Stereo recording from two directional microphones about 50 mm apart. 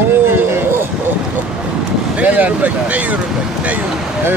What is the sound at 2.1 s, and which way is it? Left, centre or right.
Speech, right.